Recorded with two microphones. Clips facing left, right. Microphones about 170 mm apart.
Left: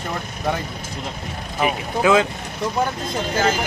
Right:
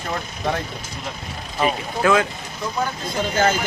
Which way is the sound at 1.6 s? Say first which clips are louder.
Left 1 dB; 15° left (ahead or behind).